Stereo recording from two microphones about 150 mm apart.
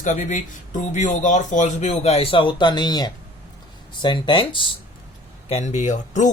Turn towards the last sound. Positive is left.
turn(degrees=55)  # may be behind; listen again after turning